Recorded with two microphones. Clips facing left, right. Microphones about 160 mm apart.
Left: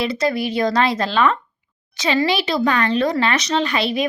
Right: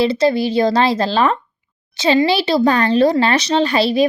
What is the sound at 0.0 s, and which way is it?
Speech, 30° right (ahead or behind).